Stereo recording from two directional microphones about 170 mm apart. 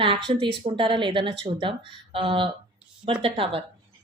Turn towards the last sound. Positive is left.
turn(degrees=-35)  # may be behind; listen again after turning